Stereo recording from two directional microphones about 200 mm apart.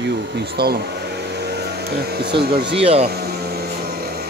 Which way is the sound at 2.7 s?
30° right (ahead or behind).